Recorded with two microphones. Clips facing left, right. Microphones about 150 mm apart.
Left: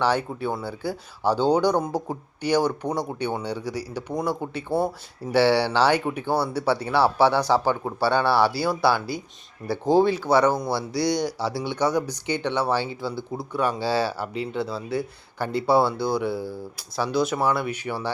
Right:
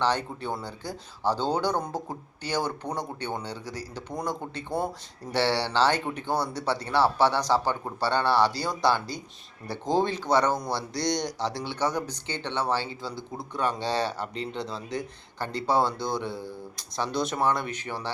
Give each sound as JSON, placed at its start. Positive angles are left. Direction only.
{"t": 0.0, "sound": "speech", "side_deg": 10}
{"t": 13.0, "sound": "speech", "side_deg": -15}
{"t": 13.5, "sound": "speech", "side_deg": 10}